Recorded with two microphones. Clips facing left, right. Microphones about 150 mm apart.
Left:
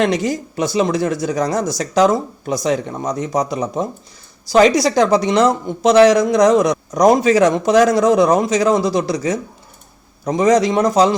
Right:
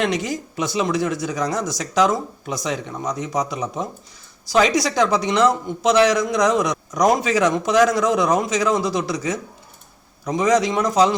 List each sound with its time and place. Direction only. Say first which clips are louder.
0.0 s speech: left 5 dB; 35° left (ahead or behind)